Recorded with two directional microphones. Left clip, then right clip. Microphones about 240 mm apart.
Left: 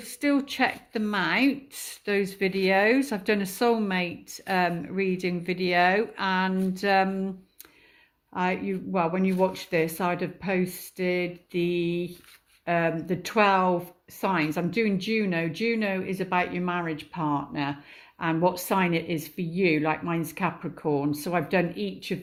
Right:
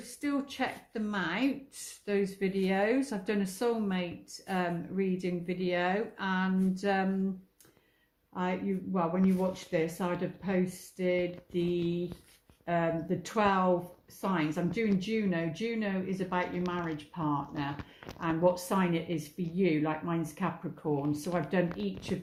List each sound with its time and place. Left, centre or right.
0.2 s speech: left
8.3 s speech: left